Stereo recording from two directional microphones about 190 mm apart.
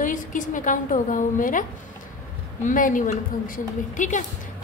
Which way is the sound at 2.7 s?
45° left (ahead or behind).